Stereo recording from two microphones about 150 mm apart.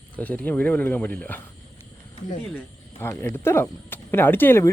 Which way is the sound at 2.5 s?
15° left (ahead or behind).